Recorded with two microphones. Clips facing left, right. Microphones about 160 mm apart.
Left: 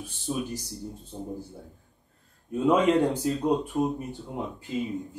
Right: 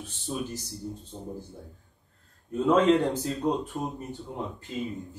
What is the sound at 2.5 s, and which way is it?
Speech, 10° left (ahead or behind).